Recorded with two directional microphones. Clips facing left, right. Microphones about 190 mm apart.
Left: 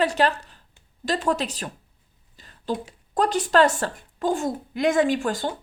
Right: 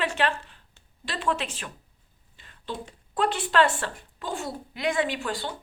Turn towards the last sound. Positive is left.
turn(degrees=45)  # may be behind; listen again after turning